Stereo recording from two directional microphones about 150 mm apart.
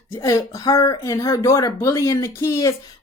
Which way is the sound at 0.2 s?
20° left (ahead or behind).